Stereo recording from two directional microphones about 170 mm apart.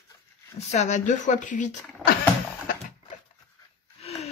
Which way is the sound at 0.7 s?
45° left (ahead or behind).